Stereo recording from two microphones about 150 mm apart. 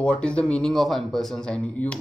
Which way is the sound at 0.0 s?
5° left (ahead or behind).